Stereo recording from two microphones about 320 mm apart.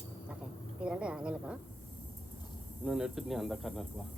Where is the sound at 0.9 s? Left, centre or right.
Centre.